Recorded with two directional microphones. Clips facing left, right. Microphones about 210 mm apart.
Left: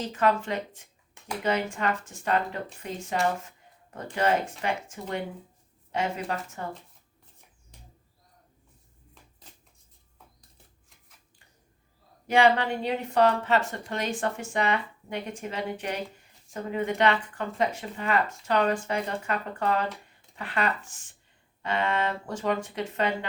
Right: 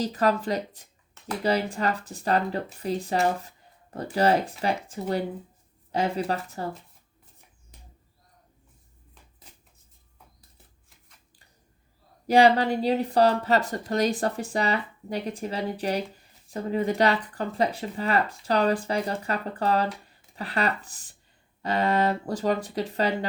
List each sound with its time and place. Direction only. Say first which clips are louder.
0.0 s speech: right 2 dB; 35° right (ahead or behind)
12.3 s speech: right 3 dB; 35° right (ahead or behind)